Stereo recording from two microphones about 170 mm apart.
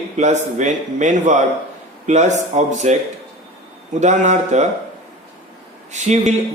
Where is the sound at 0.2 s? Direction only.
45° right (ahead or behind).